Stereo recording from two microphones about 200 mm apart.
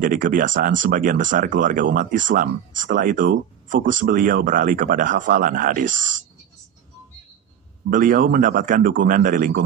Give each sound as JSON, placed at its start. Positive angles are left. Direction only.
{"t": 0.0, "sound": "speech", "side_deg": -45}
{"t": 7.9, "sound": "speech", "side_deg": -40}